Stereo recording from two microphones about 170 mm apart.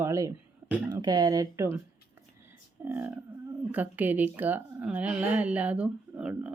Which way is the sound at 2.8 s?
10° right (ahead or behind).